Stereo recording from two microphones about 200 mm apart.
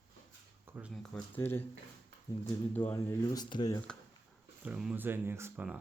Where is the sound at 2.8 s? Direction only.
10° left (ahead or behind).